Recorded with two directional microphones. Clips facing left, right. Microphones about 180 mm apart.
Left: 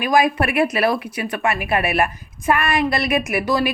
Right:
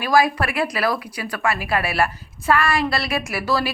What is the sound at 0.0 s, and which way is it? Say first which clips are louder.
A woman's voice: left 1 dB; 20° left (ahead or behind).